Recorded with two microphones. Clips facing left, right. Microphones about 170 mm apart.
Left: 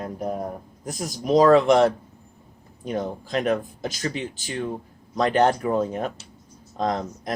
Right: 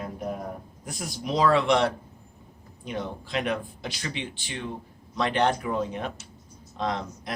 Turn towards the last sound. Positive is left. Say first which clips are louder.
# left 4 dB
turn(degrees=40)  # may be behind; listen again after turning